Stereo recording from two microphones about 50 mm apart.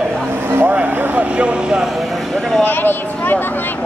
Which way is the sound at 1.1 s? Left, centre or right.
Right.